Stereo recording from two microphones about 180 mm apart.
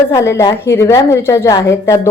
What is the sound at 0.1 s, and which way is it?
A woman's voice, 15° left (ahead or behind).